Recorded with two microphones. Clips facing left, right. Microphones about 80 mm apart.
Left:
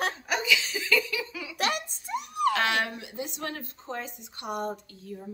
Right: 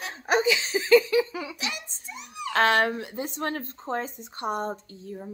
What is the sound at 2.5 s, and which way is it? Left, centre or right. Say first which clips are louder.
Speech: right 10 dB; right.